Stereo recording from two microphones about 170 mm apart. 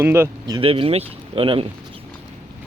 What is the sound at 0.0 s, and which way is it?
Speech, 15° right (ahead or behind).